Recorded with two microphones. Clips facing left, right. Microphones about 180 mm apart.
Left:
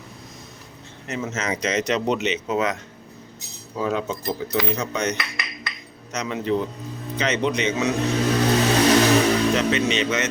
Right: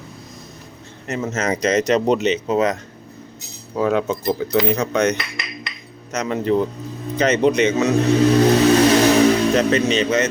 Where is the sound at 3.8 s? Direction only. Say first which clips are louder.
Right 6 dB; 60° right (ahead or behind).